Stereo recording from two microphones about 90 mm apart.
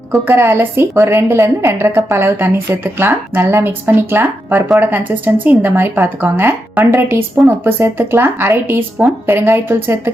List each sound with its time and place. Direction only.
0.3 s a woman's voice: 30° right (ahead or behind)